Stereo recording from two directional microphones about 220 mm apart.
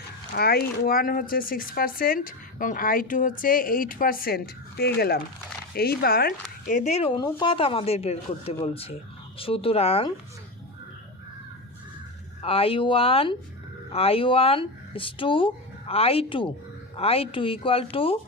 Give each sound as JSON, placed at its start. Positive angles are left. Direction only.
{"t": 0.3, "sound": "speech", "side_deg": 45}
{"t": 6.7, "sound": "speech", "side_deg": 35}
{"t": 12.4, "sound": "speech", "side_deg": 25}